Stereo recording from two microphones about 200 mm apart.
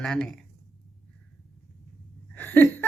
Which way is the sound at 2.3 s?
10° left (ahead or behind).